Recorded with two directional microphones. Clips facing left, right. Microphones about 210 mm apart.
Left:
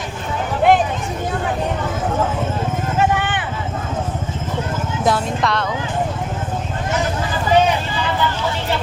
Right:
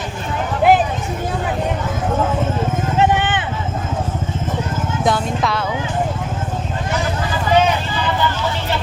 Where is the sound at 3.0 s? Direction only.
20° right (ahead or behind).